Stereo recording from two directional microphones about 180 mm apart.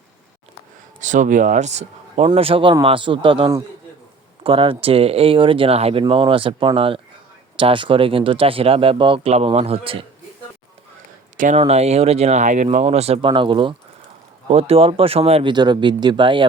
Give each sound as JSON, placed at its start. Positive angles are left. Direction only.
{"t": 1.0, "sound": "speech", "side_deg": -45}
{"t": 11.3, "sound": "speech", "side_deg": -40}